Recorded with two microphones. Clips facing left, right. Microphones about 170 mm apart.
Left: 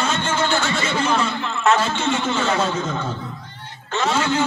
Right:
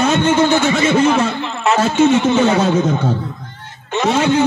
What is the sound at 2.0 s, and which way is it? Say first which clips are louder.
Speech: right 10 dB; 20° right (ahead or behind).